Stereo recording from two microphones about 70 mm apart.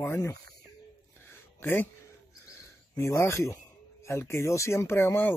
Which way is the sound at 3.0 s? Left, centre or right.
Left.